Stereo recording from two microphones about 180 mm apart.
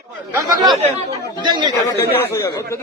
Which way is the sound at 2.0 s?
15° left (ahead or behind).